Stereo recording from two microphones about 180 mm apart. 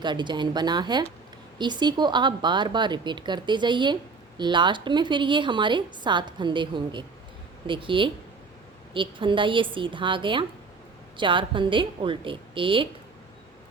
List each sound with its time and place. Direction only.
0.0 s a woman's voice: 25° right (ahead or behind)